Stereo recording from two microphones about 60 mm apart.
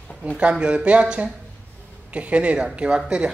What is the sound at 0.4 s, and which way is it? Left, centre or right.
Speech, centre.